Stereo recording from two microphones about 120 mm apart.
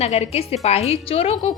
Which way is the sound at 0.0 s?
60° left (ahead or behind).